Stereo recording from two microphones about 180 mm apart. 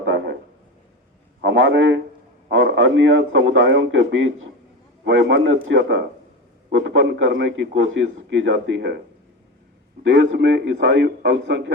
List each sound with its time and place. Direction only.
0.0 s a sound: 90° right
1.4 s a man's voice: 90° right
10.0 s a man's voice: 85° right